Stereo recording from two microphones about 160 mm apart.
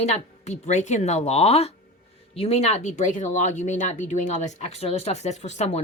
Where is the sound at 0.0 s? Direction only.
45° left (ahead or behind).